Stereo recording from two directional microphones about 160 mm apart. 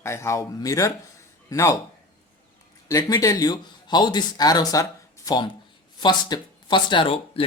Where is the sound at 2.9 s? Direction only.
20° left (ahead or behind).